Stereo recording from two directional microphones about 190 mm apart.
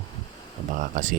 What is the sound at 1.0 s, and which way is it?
Speech, 40° right (ahead or behind).